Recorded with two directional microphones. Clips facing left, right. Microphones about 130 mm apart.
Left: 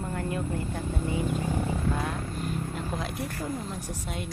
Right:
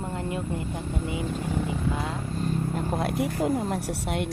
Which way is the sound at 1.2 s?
15° left (ahead or behind).